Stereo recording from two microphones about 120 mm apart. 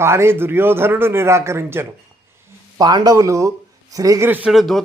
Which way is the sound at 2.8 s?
30° right (ahead or behind).